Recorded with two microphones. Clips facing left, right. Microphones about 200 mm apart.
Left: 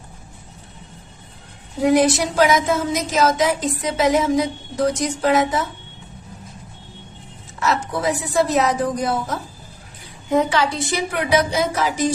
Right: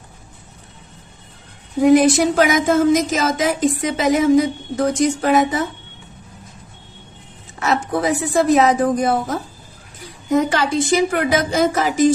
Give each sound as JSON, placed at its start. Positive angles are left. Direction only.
{"t": 1.9, "sound": "a woman's voice", "side_deg": -50}
{"t": 7.6, "sound": "a woman's voice", "side_deg": -55}